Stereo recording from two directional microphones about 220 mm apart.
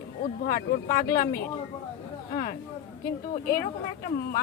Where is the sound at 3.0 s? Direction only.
40° left (ahead or behind).